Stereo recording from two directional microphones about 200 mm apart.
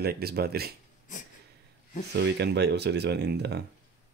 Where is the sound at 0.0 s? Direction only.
50° right (ahead or behind).